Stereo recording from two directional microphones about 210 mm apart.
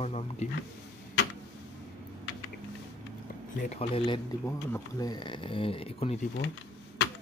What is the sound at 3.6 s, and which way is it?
Speech, 30° left (ahead or behind).